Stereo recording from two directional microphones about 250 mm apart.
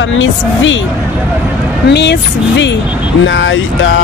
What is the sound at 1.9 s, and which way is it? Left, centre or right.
Speech, left.